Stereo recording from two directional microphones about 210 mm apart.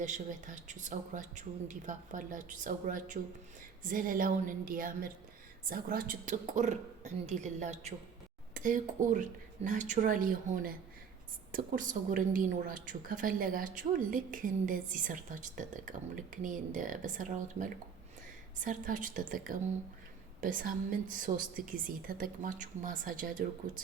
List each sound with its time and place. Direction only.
0.0 s a woman's voice: 35° right (ahead or behind)